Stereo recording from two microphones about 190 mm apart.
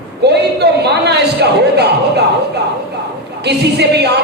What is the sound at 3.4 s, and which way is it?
Speech, 60° right (ahead or behind).